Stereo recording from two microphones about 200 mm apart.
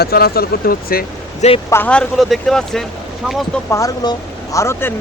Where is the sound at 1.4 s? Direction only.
30° left (ahead or behind).